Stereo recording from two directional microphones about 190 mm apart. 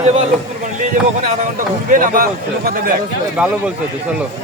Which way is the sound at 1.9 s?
45° right (ahead or behind).